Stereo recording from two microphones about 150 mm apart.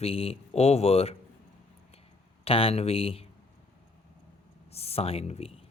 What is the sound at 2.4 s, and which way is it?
Speech, 40° left (ahead or behind).